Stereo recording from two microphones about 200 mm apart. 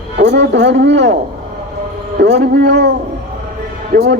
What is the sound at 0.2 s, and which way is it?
Speech, 60° right (ahead or behind).